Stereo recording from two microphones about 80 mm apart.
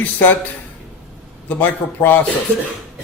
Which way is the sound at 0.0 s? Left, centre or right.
Left.